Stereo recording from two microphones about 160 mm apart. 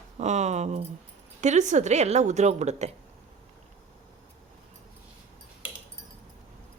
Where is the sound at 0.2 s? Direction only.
45° right (ahead or behind).